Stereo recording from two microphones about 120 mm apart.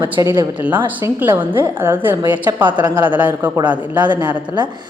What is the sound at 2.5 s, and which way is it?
Speech, 30° right (ahead or behind).